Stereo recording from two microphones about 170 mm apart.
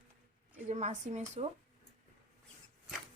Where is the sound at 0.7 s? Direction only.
45° right (ahead or behind).